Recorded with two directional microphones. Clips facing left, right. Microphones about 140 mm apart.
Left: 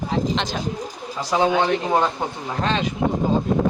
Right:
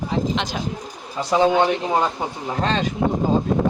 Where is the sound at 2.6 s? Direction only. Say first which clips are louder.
Right 1 dB; 35° right (ahead or behind).